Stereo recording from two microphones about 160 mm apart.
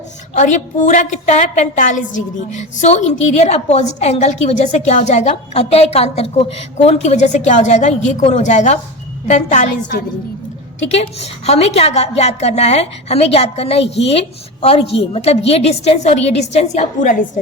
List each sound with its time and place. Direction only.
0.3 s a woman's voice: 50° left (ahead or behind)
10.8 s a woman's voice: 40° left (ahead or behind)